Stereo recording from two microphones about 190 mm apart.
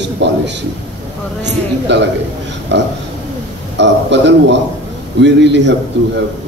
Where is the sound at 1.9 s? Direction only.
70° right (ahead or behind).